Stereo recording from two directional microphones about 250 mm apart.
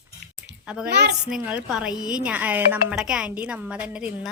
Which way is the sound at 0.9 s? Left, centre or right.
Right.